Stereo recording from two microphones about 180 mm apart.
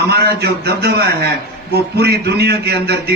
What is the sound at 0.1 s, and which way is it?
A man's voice, 65° right (ahead or behind).